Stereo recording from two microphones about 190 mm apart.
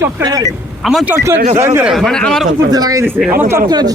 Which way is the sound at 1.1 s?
15° right (ahead or behind).